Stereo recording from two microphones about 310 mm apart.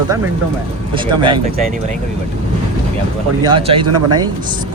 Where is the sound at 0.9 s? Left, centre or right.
Centre.